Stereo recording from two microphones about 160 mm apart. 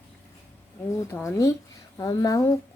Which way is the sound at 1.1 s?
15° left (ahead or behind).